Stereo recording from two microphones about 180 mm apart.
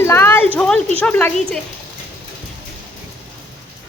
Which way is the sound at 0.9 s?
10° left (ahead or behind).